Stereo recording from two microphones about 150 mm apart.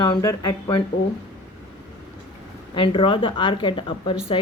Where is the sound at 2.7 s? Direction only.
35° left (ahead or behind).